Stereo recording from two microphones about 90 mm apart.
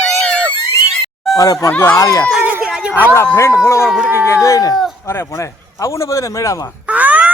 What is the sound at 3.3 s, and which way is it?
Speech, 30° left (ahead or behind).